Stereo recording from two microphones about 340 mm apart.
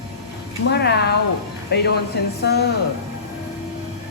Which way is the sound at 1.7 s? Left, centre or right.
Left.